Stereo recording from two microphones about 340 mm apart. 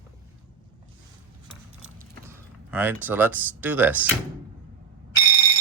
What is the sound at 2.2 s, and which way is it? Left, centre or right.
Speech, centre.